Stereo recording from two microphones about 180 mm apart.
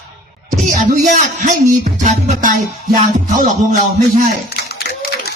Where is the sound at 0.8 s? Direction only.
45° right (ahead or behind).